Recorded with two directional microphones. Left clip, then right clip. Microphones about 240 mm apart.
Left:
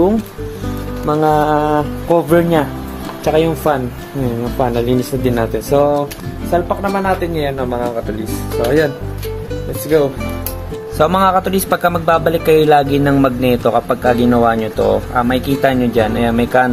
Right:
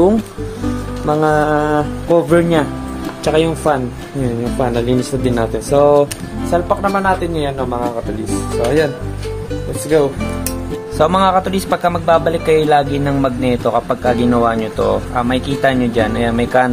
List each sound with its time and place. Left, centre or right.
1.0 s a man's voice: centre